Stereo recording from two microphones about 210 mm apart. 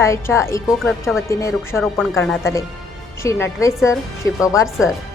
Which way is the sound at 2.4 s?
15° left (ahead or behind).